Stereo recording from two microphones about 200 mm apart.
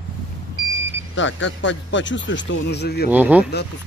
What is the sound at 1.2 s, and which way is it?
Speech, 65° left (ahead or behind).